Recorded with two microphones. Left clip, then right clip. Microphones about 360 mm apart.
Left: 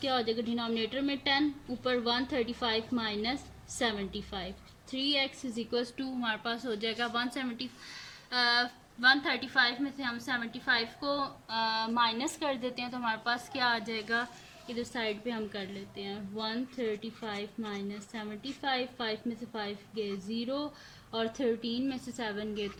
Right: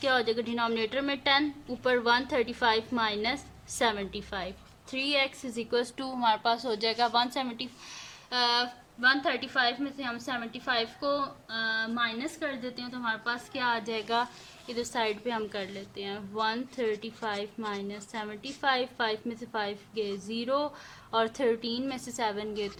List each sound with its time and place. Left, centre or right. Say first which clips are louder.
0.0 s a woman's voice: right 4 dB; centre